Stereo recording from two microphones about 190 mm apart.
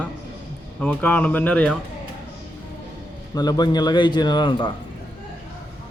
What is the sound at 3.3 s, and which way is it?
A man's voice, 20° left (ahead or behind).